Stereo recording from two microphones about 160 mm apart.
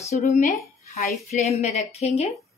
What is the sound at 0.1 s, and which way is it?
A woman's voice, 40° left (ahead or behind).